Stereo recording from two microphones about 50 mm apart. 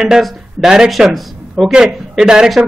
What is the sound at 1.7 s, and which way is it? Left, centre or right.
Speech, centre.